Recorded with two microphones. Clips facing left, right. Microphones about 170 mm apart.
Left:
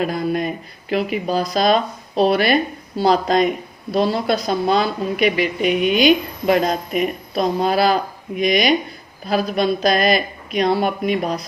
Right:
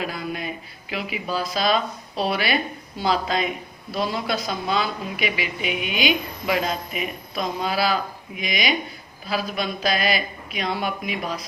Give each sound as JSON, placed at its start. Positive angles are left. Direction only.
{"t": 0.0, "sound": "a woman's voice", "side_deg": 45}